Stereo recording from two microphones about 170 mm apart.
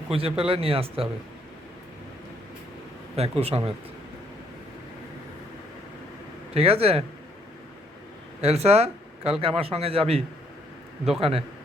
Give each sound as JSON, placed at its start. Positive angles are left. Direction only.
{"t": 0.1, "sound": "speech", "side_deg": -35}
{"t": 3.2, "sound": "speech", "side_deg": -35}
{"t": 6.5, "sound": "speech", "side_deg": -35}
{"t": 8.4, "sound": "speech", "side_deg": -40}